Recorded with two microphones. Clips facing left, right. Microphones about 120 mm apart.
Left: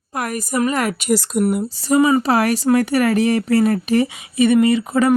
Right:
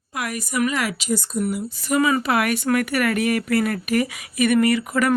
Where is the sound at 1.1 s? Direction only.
80° left.